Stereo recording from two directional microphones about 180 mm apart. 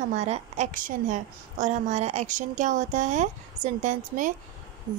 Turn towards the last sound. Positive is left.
turn(degrees=-25)  # may be behind; listen again after turning